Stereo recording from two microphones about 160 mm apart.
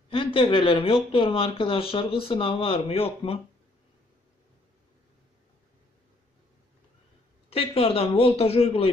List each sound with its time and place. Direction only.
0.1 s speech: 35° left (ahead or behind)
7.4 s speech: 35° left (ahead or behind)